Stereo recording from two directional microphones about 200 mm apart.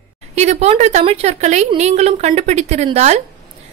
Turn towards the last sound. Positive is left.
turn(degrees=-35)  # may be behind; listen again after turning